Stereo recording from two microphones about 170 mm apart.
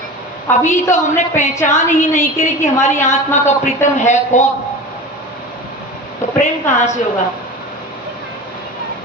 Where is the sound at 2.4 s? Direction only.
40° left (ahead or behind).